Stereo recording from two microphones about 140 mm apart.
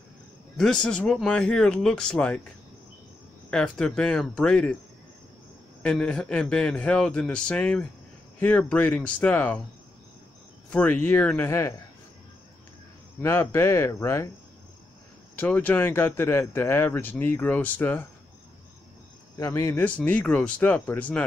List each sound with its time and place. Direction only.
0.6 s speech: 5° left (ahead or behind)
3.4 s speech: 5° left (ahead or behind)
5.8 s speech: 10° left (ahead or behind)
10.7 s speech: 10° left (ahead or behind)
13.2 s speech: 15° left (ahead or behind)
15.3 s speech: 10° left (ahead or behind)
19.3 s speech: 20° left (ahead or behind)